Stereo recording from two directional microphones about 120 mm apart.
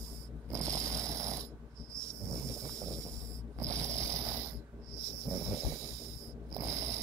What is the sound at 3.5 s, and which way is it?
Snoring, 25° right (ahead or behind).